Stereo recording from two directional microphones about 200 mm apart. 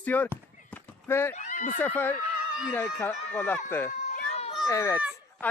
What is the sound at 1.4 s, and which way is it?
Speech, 40° left (ahead or behind).